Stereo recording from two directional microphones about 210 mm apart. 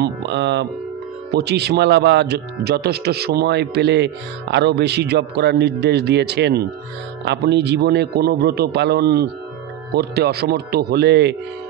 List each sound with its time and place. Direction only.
0.0 s speech: 55° right (ahead or behind)